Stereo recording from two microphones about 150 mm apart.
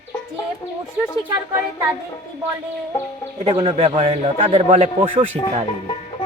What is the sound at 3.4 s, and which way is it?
A man's voice, 40° right (ahead or behind).